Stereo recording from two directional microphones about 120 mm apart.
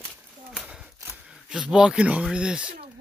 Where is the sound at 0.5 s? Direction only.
5° right (ahead or behind).